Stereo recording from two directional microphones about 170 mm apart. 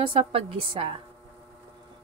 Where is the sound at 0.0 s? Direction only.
30° right (ahead or behind).